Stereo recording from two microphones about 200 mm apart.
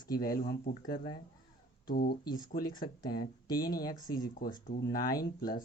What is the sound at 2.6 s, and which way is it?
Speech, 20° left (ahead or behind).